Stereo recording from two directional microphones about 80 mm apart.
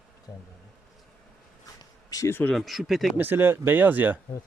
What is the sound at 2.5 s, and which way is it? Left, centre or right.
Speech, centre.